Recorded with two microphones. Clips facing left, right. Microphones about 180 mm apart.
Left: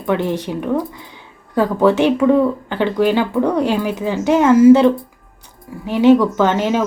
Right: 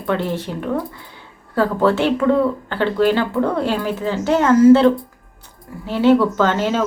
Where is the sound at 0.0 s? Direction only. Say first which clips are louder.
Left 3 dB; 15° left (ahead or behind).